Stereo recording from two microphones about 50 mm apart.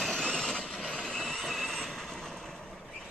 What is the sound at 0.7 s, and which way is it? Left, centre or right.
Train, centre.